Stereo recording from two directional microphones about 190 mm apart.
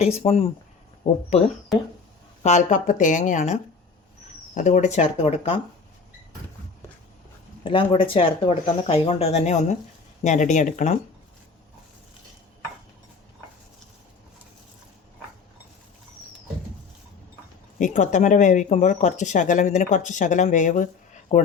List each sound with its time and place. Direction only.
0.0 s speech: 35° left (ahead or behind)
2.4 s speech: 40° left (ahead or behind)
7.6 s speech: 25° left (ahead or behind)
17.7 s speech: 40° left (ahead or behind)